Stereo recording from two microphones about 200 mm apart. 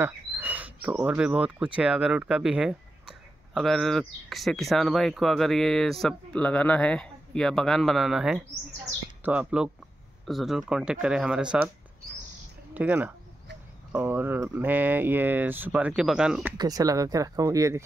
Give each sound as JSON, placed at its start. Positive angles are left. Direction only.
{"t": 0.0, "sound": "speech", "side_deg": -10}
{"t": 12.7, "sound": "speech", "side_deg": -10}
{"t": 16.5, "sound": "speech", "side_deg": -20}